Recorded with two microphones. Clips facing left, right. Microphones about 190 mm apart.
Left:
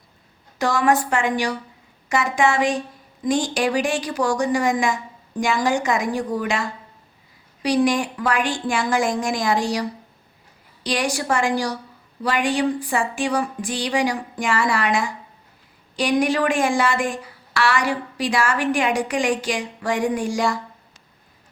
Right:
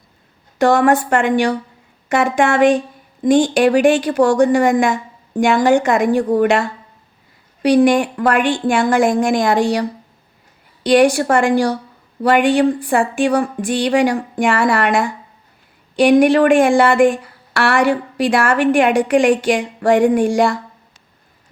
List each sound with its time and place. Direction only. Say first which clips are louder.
0.6 s speech: right 6 dB; 55° right (ahead or behind)
10.8 s speech: right 11 dB; 55° right (ahead or behind)